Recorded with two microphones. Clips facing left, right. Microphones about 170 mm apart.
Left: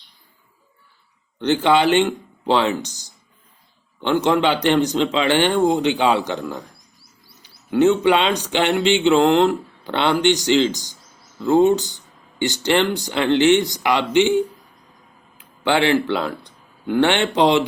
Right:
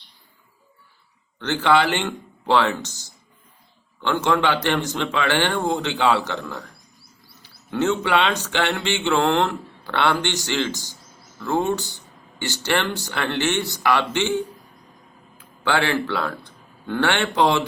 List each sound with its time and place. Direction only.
1.4 s speech: 15° left (ahead or behind)